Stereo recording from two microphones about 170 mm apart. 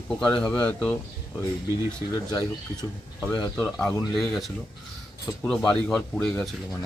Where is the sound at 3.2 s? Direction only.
10° left (ahead or behind).